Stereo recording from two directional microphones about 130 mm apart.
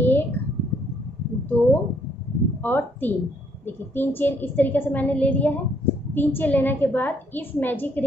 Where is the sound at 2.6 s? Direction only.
15° left (ahead or behind).